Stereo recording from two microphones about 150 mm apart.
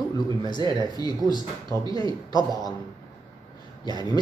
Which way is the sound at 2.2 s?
25° left (ahead or behind).